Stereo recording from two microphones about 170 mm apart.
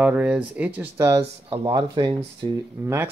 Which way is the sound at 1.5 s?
30° right (ahead or behind).